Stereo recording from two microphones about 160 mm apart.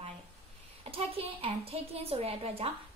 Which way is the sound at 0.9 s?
35° right (ahead or behind).